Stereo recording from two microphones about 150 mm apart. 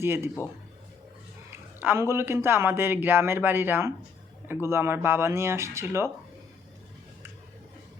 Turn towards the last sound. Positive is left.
turn(degrees=-15)  # may be behind; listen again after turning